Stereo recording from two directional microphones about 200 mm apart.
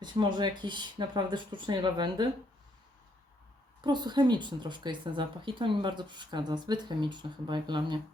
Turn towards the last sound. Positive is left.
turn(degrees=-20)  # may be behind; listen again after turning